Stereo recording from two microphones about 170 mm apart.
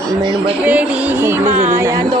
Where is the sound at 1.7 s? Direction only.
15° right (ahead or behind).